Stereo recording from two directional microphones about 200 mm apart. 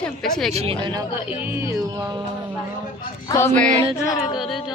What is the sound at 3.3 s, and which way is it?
Speech, 15° left (ahead or behind).